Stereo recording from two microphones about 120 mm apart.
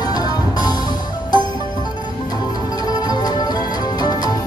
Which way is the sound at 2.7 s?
35° left (ahead or behind).